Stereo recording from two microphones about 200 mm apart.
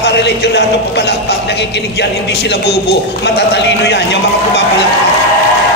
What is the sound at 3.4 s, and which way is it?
A man's voice, 60° left (ahead or behind).